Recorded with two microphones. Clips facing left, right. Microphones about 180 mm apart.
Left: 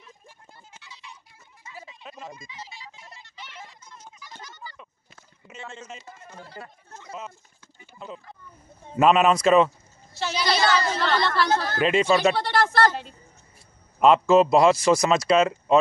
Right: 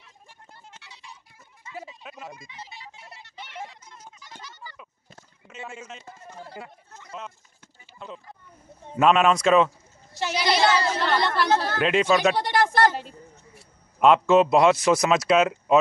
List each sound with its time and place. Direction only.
0.6 s music: 70° right (ahead or behind)
2.0 s a sound: 5° right (ahead or behind)
2.3 s a sound: 60° right (ahead or behind)
5.6 s a woman's voice: 10° right (ahead or behind)
7.1 s speech: centre (ahead or behind)
8.9 s speech: centre (ahead or behind)
10.1 s a woman's voice: 15° right (ahead or behind)
11.8 s speech: centre (ahead or behind)
12.4 s a woman's voice: 15° right (ahead or behind)
13.9 s speech: centre (ahead or behind)